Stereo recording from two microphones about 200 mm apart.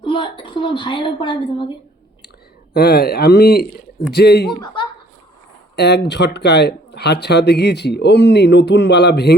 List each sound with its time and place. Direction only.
0.0 s a woman's voice: 25° left (ahead or behind)
2.7 s speech: 50° left (ahead or behind)
4.6 s chuckle: 20° left (ahead or behind)
5.7 s speech: 60° left (ahead or behind)